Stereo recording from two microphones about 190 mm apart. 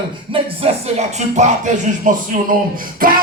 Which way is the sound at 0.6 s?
30° right (ahead or behind).